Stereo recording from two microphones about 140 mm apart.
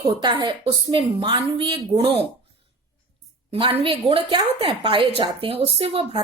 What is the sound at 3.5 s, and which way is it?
A woman's voice, 40° right (ahead or behind).